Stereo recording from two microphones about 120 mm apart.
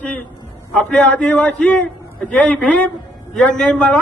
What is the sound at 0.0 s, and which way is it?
A man's voice, 10° left (ahead or behind).